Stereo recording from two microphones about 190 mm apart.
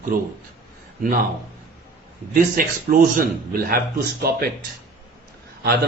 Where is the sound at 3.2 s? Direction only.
50° right (ahead or behind).